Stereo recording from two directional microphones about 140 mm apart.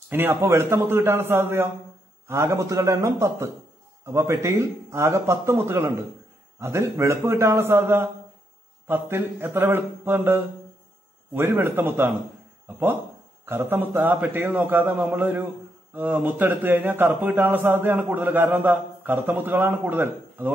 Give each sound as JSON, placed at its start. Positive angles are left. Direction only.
{"t": 0.1, "sound": "speech", "side_deg": -15}